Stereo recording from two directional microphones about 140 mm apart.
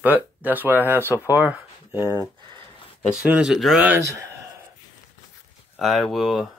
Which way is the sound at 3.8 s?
20° right (ahead or behind).